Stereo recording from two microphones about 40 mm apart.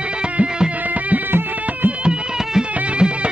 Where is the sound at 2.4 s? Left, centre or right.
Centre.